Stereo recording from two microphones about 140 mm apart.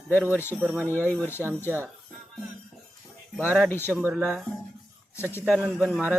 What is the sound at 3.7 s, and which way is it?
Speech, 15° left (ahead or behind).